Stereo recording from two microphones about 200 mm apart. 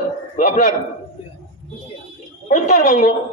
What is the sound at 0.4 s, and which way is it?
Speech, 40° left (ahead or behind).